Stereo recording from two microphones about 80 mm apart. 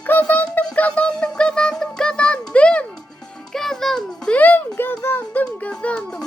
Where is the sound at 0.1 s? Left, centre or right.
Left.